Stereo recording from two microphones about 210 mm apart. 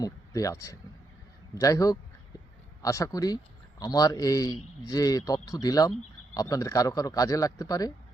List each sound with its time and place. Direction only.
0.0 s a man's voice: 15° left (ahead or behind)